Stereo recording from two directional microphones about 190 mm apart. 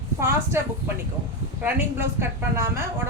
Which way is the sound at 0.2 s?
15° right (ahead or behind).